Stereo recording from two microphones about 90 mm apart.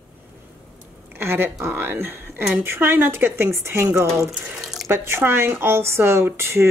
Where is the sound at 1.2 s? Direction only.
25° right (ahead or behind).